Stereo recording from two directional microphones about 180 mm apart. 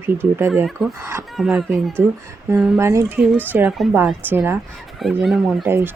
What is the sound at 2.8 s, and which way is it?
Speech, 15° right (ahead or behind).